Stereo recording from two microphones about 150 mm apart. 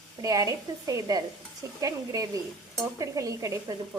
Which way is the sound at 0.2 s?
25° right (ahead or behind).